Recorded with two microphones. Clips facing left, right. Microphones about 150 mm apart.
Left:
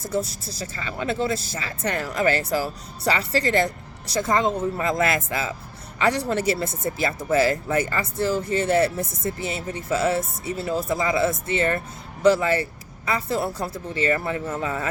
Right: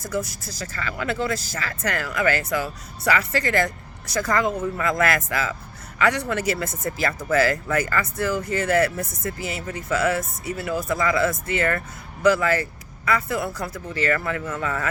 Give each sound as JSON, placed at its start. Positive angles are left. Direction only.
{"t": 0.0, "sound": "speech", "side_deg": 30}